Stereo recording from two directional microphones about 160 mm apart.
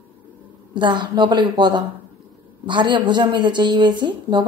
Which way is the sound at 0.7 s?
30° right (ahead or behind).